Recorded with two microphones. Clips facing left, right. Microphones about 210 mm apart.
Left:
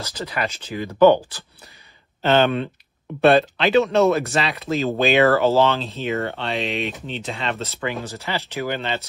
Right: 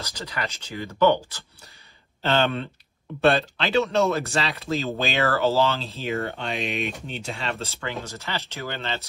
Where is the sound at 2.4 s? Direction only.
15° left (ahead or behind).